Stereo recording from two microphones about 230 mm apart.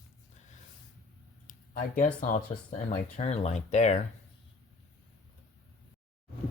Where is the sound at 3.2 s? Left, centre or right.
Left.